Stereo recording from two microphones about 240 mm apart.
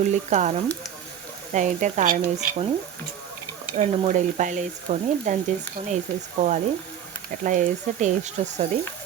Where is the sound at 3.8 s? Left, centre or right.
Right.